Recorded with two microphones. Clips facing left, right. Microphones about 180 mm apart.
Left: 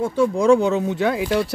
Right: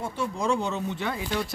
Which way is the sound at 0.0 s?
90° left.